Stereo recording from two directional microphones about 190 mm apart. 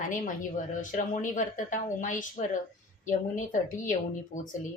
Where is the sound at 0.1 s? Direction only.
45° left (ahead or behind).